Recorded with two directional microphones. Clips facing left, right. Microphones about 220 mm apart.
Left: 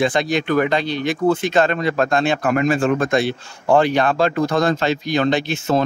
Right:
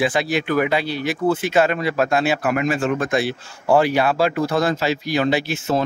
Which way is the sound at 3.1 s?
5° right (ahead or behind).